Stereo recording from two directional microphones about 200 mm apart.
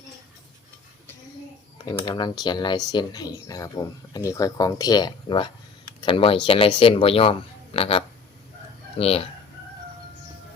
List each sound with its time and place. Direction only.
1.8 s speech: 20° left (ahead or behind)